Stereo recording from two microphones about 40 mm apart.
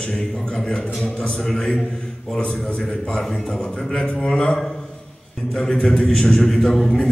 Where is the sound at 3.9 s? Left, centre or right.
Centre.